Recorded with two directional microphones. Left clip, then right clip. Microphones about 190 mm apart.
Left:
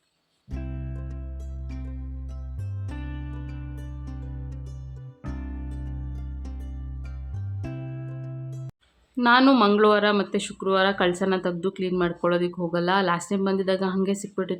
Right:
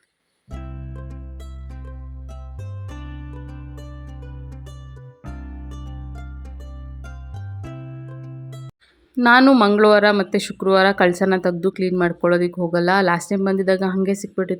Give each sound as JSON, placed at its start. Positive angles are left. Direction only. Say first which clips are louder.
{"t": 0.6, "sound": "music", "louder": "left 2 dB", "side_deg": 0}
{"t": 2.9, "sound": "music", "louder": "even", "side_deg": 0}
{"t": 5.2, "sound": "music", "louder": "left 1 dB", "side_deg": 0}
{"t": 7.6, "sound": "music", "louder": "even", "side_deg": 0}
{"t": 9.1, "sound": "speech", "louder": "right 5 dB", "side_deg": -25}